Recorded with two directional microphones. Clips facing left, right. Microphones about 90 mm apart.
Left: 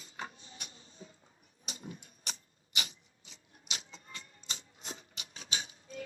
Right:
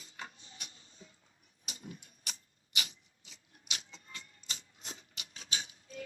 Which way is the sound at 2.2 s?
30° left (ahead or behind).